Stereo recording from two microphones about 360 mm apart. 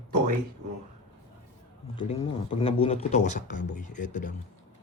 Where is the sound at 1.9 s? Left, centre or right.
Centre.